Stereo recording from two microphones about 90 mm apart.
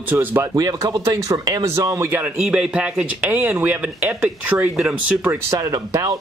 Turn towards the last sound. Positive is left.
turn(degrees=-40)  # may be behind; listen again after turning